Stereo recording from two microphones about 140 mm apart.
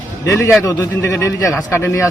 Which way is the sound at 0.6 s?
20° left (ahead or behind).